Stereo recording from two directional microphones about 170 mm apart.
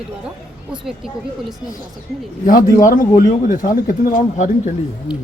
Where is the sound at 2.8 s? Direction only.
50° left (ahead or behind).